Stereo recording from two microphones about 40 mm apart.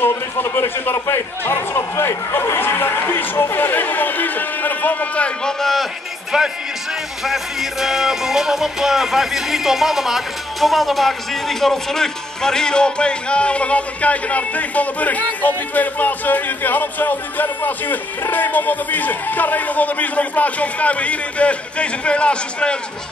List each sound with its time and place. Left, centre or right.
0.0 s a man's voice: left
3.0 s speech: left
3.3 s speech: left
5.4 s a man's voice: centre
6.3 s music: centre; by 22.8 s left